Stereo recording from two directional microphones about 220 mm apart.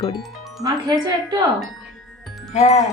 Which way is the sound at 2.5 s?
30° left (ahead or behind).